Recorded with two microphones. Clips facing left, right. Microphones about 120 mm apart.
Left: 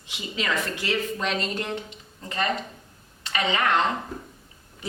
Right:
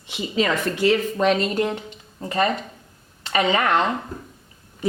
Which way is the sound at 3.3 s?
40° right (ahead or behind).